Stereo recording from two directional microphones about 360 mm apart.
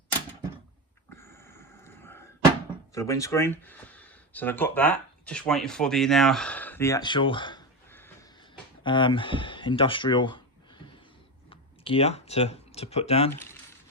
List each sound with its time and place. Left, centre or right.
1.1 s a sound: centre
2.9 s speech: centre
13.3 s speech: centre